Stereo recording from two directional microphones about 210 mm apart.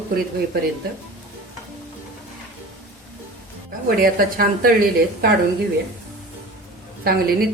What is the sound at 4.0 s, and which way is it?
Speech, 45° right (ahead or behind).